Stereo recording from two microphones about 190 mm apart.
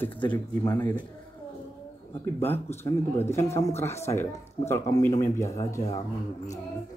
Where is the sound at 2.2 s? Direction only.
10° left (ahead or behind).